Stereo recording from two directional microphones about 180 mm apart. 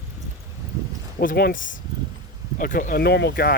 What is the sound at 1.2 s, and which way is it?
Speech, 60° left (ahead or behind).